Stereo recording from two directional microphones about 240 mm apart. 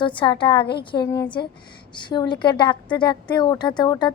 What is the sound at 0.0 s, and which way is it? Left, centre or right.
A woman's voice, centre.